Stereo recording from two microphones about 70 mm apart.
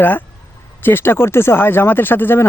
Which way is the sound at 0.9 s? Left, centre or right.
Left.